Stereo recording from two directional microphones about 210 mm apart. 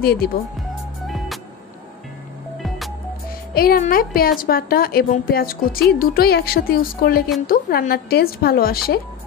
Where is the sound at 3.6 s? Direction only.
45° left (ahead or behind).